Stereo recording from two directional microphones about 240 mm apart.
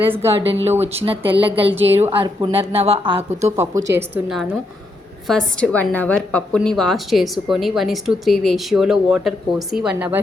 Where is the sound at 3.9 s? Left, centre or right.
Centre.